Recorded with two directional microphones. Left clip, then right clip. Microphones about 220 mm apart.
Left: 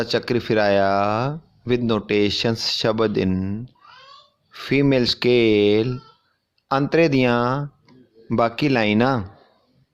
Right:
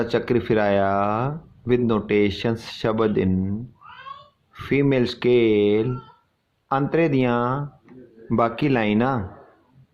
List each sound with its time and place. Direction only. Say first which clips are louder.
0.0 s speech: even; 25° left (ahead or behind)
4.5 s speech: left 2 dB; 25° left (ahead or behind)